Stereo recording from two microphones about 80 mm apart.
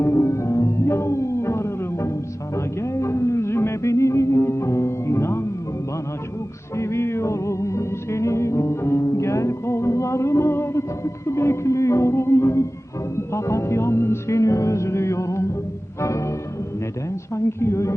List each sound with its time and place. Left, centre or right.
0.0 s music: left
6.7 s music: left
17.3 s a woman's voice: left